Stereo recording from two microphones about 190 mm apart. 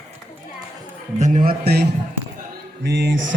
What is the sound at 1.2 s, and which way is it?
Speech, 40° right (ahead or behind).